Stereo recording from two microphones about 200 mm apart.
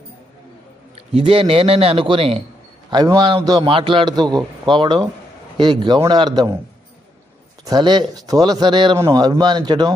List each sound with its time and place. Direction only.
0.9 s speech: 30° right (ahead or behind)
7.6 s speech: 20° right (ahead or behind)